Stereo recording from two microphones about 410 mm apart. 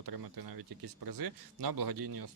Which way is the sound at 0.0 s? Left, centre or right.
Right.